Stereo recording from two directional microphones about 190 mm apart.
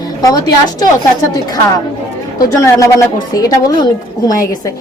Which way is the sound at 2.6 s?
15° left (ahead or behind).